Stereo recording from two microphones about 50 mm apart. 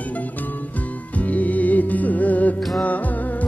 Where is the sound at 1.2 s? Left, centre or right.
Left.